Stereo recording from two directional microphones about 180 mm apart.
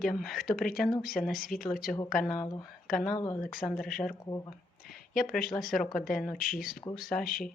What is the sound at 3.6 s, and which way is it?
Speech, centre (ahead or behind).